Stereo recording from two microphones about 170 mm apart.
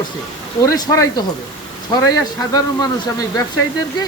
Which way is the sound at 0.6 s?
20° left (ahead or behind).